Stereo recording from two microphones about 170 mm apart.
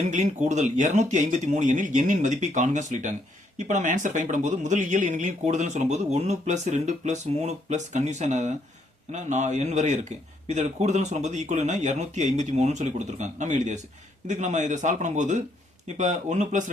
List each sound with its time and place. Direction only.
0.0 s speech: 45° right (ahead or behind)